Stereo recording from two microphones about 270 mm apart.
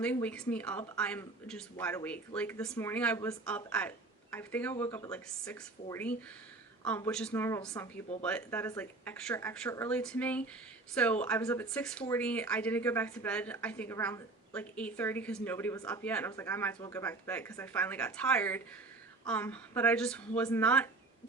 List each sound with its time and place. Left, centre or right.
0.0 s speech: centre